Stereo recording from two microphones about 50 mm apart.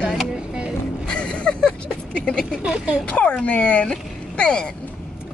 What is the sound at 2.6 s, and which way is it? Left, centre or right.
Speech, centre.